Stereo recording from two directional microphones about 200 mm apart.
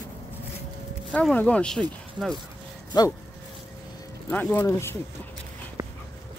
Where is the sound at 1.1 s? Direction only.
5° left (ahead or behind).